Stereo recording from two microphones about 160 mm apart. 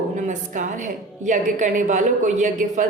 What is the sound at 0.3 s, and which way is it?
A woman's voice, 50° right (ahead or behind).